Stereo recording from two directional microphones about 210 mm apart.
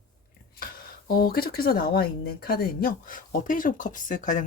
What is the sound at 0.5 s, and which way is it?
Speech, 45° left (ahead or behind).